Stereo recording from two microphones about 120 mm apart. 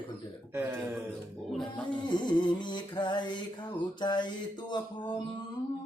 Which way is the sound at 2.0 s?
40° left (ahead or behind).